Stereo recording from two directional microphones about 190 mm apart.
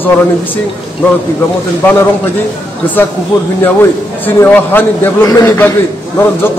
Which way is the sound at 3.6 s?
10° left (ahead or behind).